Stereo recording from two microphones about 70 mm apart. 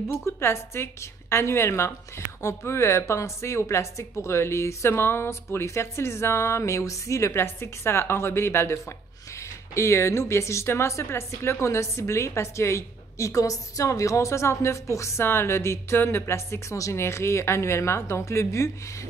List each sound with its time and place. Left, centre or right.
0.1 s a woman's voice: left